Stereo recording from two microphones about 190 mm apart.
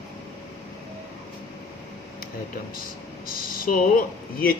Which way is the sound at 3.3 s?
50° left (ahead or behind).